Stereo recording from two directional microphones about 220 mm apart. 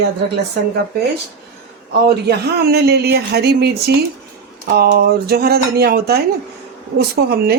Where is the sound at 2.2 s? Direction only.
45° right (ahead or behind).